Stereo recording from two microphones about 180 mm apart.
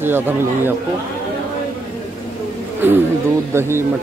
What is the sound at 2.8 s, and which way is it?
Speech, 10° right (ahead or behind).